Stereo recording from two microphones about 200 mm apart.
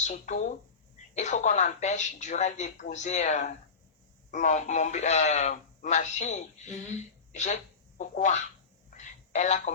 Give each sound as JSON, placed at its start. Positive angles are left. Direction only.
{"t": 0.1, "sound": "a woman's voice", "side_deg": 35}
{"t": 8.9, "sound": "telephone", "side_deg": 35}